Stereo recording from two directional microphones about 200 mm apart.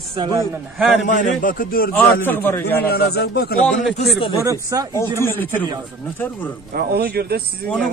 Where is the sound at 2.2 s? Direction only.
10° left (ahead or behind).